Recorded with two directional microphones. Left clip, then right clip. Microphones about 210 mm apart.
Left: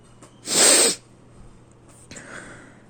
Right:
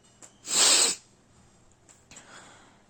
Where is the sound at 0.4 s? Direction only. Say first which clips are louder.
Left 5 dB; 15° left (ahead or behind).